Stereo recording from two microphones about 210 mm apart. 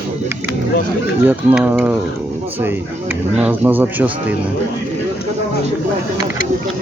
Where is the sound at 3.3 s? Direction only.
5° right (ahead or behind).